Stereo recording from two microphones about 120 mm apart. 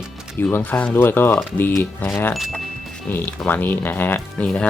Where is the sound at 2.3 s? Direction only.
Centre (ahead or behind).